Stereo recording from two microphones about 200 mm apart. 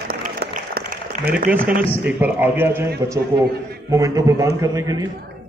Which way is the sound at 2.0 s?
10° right (ahead or behind).